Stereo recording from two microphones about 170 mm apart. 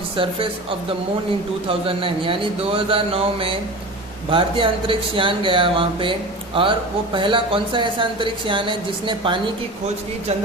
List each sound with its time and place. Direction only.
1.6 s speech: 30° right (ahead or behind)